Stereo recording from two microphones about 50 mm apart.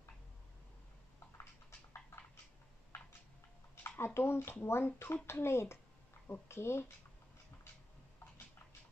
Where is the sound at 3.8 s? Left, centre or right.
Left.